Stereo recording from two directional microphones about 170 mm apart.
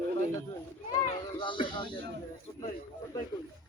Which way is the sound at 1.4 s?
30° left (ahead or behind).